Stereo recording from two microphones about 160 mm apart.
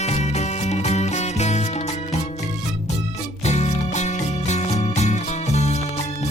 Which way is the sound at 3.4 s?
45° left (ahead or behind).